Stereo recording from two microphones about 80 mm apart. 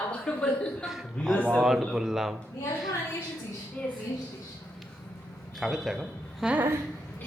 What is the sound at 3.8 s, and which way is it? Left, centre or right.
Speech, centre.